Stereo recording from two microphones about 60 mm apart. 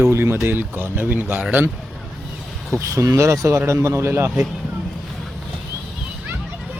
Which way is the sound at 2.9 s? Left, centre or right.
Right.